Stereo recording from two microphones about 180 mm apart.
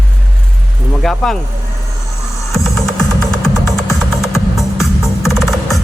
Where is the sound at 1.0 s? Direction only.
Centre (ahead or behind).